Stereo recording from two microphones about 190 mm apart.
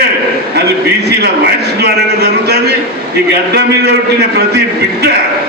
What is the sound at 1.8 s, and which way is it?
Speech, 55° right (ahead or behind).